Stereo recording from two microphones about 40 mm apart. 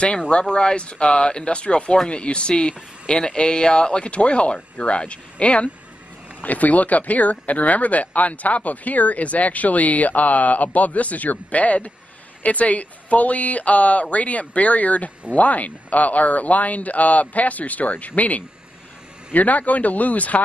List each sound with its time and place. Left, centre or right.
0.3 s speech: left